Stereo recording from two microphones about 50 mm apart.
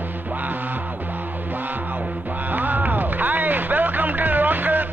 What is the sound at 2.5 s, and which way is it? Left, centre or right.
Music, right.